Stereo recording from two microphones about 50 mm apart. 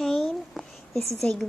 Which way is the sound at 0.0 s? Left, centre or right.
Centre.